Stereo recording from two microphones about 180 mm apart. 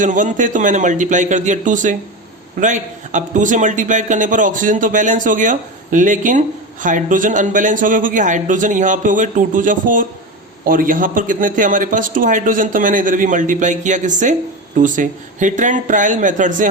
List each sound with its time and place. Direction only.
0.0 s a man's voice: 45° right (ahead or behind)